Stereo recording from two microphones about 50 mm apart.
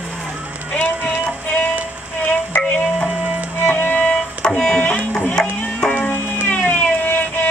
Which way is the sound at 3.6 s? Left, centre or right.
Left.